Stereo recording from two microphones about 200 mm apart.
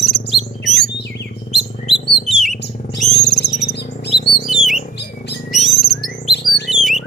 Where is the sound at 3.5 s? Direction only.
55° left (ahead or behind).